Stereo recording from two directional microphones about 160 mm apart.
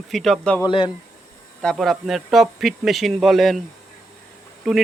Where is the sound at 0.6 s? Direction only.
30° left (ahead or behind).